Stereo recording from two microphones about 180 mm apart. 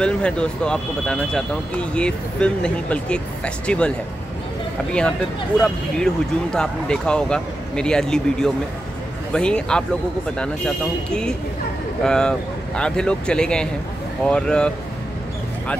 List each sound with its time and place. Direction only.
0.0 s speech: 5° left (ahead or behind)
5.6 s speech: 5° left (ahead or behind)